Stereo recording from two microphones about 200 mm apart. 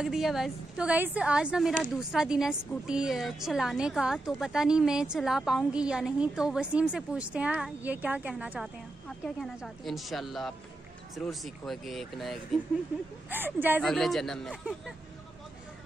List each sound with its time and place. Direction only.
0.0 s a woman's voice: centre (ahead or behind)
13.3 s speech: 10° right (ahead or behind)
13.8 s a woman's voice: centre (ahead or behind)